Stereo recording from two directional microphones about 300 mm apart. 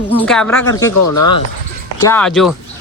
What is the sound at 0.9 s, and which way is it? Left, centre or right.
Speech, left.